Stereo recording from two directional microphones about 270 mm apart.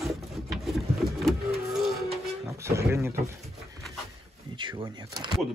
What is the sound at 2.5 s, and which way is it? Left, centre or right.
Speech, centre.